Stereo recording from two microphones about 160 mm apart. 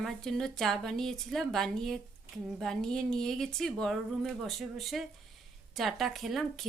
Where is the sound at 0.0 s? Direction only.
5° left (ahead or behind).